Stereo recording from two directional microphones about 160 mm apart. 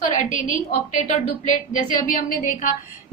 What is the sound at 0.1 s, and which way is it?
Speech, 50° left (ahead or behind).